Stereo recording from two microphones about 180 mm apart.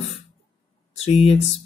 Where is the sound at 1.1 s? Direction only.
35° left (ahead or behind).